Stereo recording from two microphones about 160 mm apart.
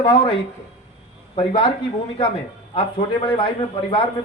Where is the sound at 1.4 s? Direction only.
30° left (ahead or behind).